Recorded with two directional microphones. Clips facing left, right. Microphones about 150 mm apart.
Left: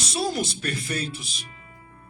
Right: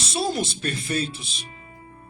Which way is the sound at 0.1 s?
25° right (ahead or behind).